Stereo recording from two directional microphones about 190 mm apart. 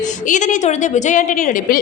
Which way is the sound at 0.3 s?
40° left (ahead or behind).